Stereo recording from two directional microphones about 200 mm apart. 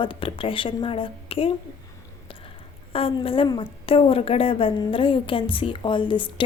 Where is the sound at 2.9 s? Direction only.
30° left (ahead or behind).